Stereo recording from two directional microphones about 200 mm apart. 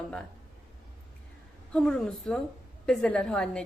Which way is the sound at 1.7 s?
5° left (ahead or behind).